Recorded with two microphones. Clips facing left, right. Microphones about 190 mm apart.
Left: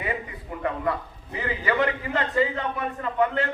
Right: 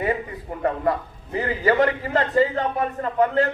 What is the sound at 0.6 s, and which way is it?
A man's voice, 40° right (ahead or behind).